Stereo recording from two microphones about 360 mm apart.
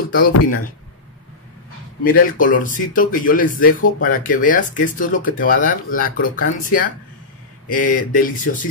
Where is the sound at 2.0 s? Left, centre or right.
Left.